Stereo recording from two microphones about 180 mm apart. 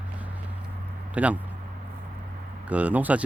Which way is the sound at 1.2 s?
10° right (ahead or behind).